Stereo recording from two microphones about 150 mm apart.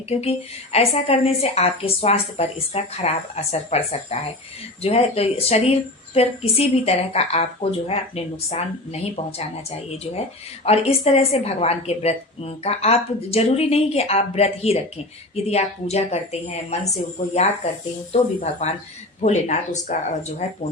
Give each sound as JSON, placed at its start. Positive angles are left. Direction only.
{"t": 0.1, "sound": "a woman's voice", "side_deg": 45}
{"t": 10.6, "sound": "a woman's voice", "side_deg": 45}
{"t": 18.1, "sound": "a woman's voice", "side_deg": 45}